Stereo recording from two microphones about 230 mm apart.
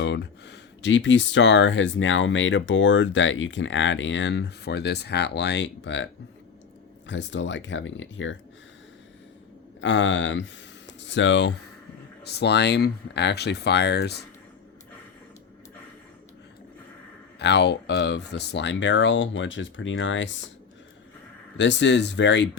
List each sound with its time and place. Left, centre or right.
0.0 s speech: left
7.1 s speech: left
9.8 s speech: left
17.4 s speech: left
21.6 s speech: left